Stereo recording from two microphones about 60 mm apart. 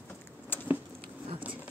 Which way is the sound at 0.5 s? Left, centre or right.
Left.